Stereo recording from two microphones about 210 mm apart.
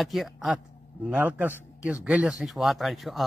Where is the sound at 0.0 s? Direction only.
Centre (ahead or behind).